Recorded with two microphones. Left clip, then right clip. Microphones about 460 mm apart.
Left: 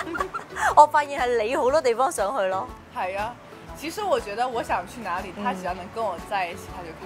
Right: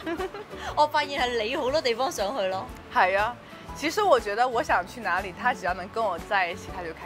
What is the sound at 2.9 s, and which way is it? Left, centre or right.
Speech, right.